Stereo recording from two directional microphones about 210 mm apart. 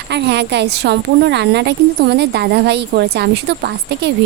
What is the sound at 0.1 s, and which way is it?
A woman's voice, 55° right (ahead or behind).